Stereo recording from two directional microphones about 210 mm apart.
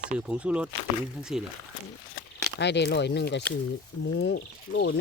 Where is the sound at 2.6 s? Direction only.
55° left (ahead or behind).